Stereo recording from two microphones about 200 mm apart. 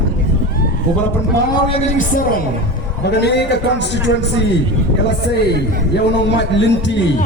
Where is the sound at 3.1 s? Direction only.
60° left (ahead or behind).